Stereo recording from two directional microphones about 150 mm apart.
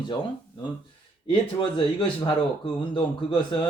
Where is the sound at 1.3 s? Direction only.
35° left (ahead or behind).